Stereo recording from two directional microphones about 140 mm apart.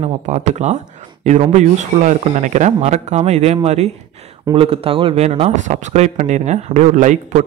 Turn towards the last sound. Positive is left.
turn(degrees=-60)  # may be behind; listen again after turning